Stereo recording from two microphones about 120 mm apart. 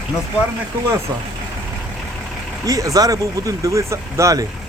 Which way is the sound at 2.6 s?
30° right (ahead or behind).